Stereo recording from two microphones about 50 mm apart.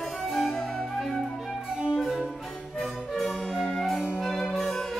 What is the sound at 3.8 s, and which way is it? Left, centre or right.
Music, centre.